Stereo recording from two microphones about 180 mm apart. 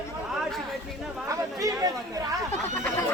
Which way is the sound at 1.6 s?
20° right (ahead or behind).